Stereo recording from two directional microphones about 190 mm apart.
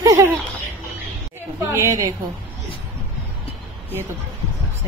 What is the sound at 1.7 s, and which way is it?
Speech, 15° right (ahead or behind).